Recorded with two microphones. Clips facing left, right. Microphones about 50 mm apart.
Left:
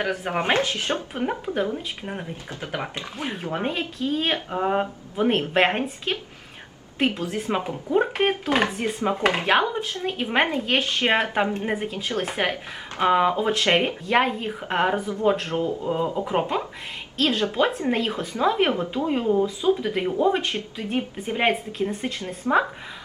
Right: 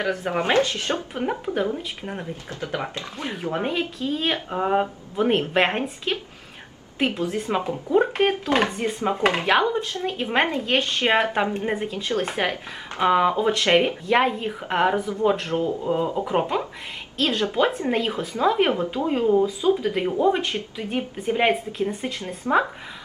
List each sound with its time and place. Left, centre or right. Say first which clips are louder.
0.0 s speech: right 1 dB; left
1.1 s a woman's voice: even; centre
7.3 s a woman's voice: right 1 dB; centre
9.6 s a woman's voice: right 1 dB; centre
12.4 s speech: left 1 dB; centre
13.0 s a woman's voice: right 1 dB; centre